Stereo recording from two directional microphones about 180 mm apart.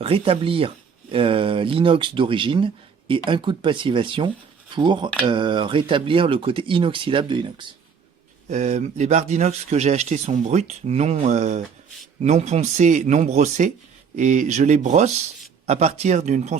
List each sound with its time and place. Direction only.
0.0 s speech: 30° right (ahead or behind)
8.4 s speech: 40° right (ahead or behind)